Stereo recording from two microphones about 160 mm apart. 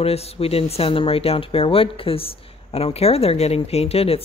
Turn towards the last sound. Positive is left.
turn(degrees=40)  # may be behind; listen again after turning